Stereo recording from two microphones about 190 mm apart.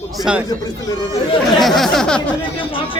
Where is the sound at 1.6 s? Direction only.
Centre (ahead or behind).